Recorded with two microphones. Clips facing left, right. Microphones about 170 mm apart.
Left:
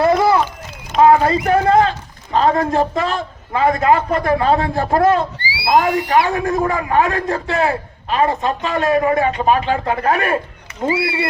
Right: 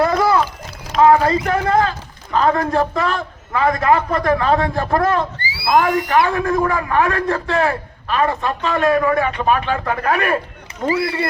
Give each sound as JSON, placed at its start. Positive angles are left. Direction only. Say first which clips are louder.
{"t": 0.0, "sound": "run", "louder": "left 2 dB", "side_deg": 25}
{"t": 1.0, "sound": "a man's voice", "louder": "left 1 dB", "side_deg": 25}
{"t": 5.4, "sound": "speech", "louder": "left 1 dB", "side_deg": -50}
{"t": 6.3, "sound": "a man's voice", "louder": "even", "side_deg": 25}